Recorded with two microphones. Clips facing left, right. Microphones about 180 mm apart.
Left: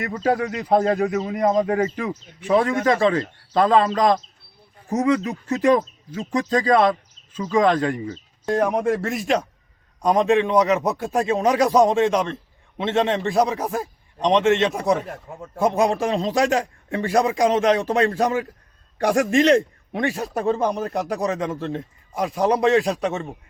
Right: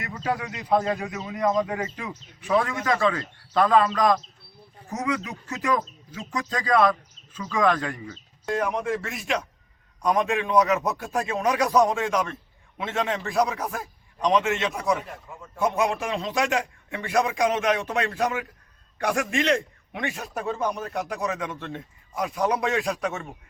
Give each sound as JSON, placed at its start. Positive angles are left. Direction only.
{"t": 0.0, "sound": "a man's voice", "side_deg": 40}